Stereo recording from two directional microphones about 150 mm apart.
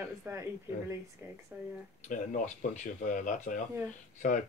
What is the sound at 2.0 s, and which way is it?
Speech, 55° left (ahead or behind).